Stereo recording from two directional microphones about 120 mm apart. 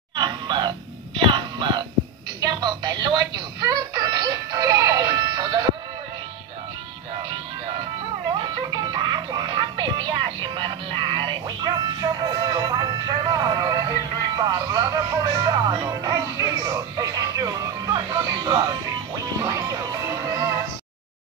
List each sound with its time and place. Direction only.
0.1 s music: 40° right (ahead or behind)
8.3 s music: 40° right (ahead or behind)